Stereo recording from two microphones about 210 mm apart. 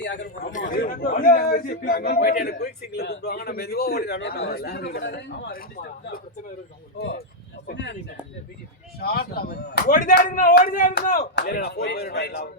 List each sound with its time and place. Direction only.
0.0 s a man's voice: 55° left (ahead or behind)
0.6 s a man's voice: 45° left (ahead or behind)
7.0 s a man's voice: 50° left (ahead or behind)
9.0 s a man's voice: 45° left (ahead or behind)